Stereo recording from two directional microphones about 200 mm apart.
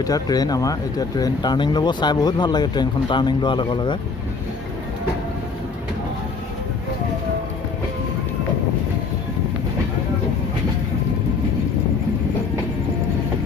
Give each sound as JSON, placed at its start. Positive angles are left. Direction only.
{"t": 0.0, "sound": "speech", "side_deg": 20}